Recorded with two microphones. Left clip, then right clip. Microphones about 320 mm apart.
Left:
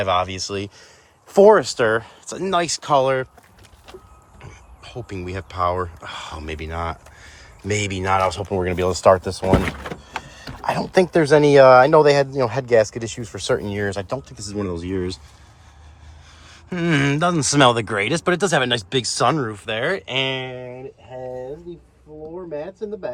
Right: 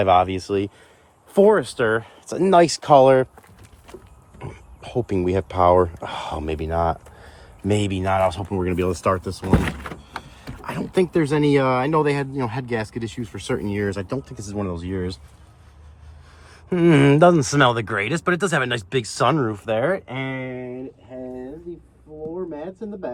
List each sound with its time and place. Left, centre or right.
0.0 s speech: centre
4.4 s speech: centre
8.8 s speech: left
9.2 s power windows: centre
10.9 s speech: centre
14.1 s speech: centre
16.5 s speech: centre